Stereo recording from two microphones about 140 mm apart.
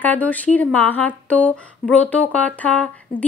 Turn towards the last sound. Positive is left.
turn(degrees=10)  # may be behind; listen again after turning